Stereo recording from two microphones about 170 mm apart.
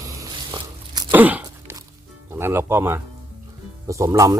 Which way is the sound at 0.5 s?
25° right (ahead or behind).